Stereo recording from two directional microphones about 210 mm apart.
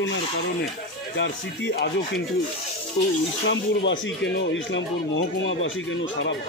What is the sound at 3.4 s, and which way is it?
Speech, 60° left (ahead or behind).